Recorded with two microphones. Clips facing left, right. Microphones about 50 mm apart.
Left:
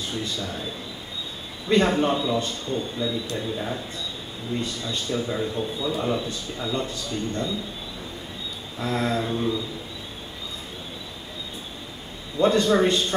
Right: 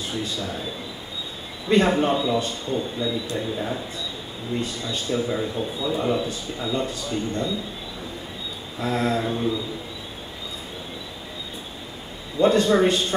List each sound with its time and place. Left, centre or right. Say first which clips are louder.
0.1 s a man's voice: right 3 dB; centre
1.8 s a man's voice: right 1 dB; centre
4.9 s a man's voice: right 3 dB; centre
8.7 s a man's voice: right 2 dB; centre
12.4 s a man's voice: right 1 dB; centre